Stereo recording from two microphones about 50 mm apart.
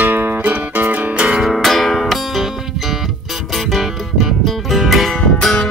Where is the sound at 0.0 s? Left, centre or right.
Right.